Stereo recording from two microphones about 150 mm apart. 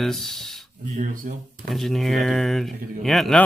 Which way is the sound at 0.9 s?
60° right (ahead or behind).